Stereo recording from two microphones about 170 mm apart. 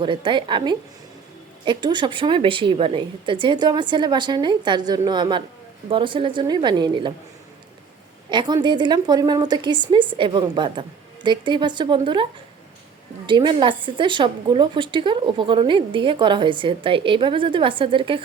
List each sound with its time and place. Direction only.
0.0 s a woman's voice: 30° right (ahead or behind)
8.3 s a woman's voice: 25° right (ahead or behind)